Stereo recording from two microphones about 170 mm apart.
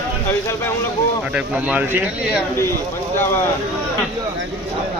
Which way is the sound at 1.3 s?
5° right (ahead or behind).